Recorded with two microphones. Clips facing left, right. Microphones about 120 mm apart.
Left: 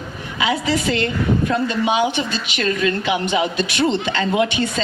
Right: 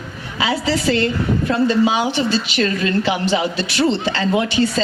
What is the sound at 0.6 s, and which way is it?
A woman's voice, 30° right (ahead or behind).